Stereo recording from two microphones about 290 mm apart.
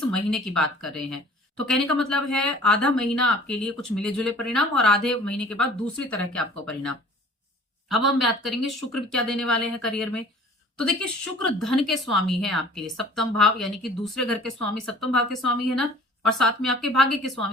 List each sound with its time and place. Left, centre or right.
0.0 s speech: centre